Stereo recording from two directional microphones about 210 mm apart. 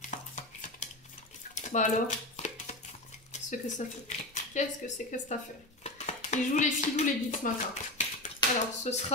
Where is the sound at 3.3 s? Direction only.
35° left (ahead or behind).